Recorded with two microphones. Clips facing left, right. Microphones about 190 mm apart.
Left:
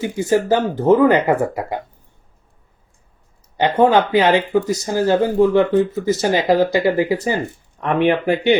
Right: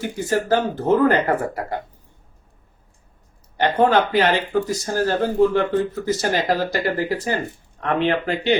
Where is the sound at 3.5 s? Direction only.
10° left (ahead or behind).